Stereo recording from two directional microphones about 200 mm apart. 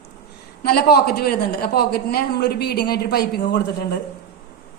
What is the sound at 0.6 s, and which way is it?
A man's voice, 50° left (ahead or behind).